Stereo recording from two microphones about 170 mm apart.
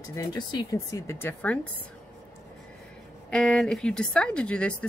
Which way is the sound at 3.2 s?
5° left (ahead or behind).